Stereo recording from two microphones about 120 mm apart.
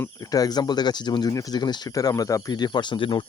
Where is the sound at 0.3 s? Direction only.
30° left (ahead or behind).